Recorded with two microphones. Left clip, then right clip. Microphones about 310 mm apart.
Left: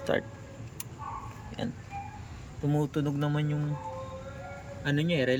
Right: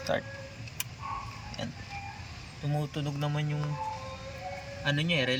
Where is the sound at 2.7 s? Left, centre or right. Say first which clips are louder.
Left 5 dB; centre.